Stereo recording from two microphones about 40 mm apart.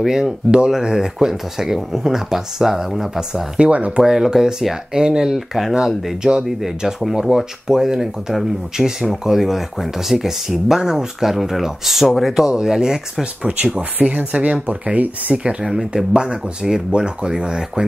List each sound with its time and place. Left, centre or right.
0.0 s speech: centre
3.5 s speech: right
4.0 s speech: centre
5.3 s speech: centre
7.0 s speech: centre
13.2 s speech: right
16.1 s speech: centre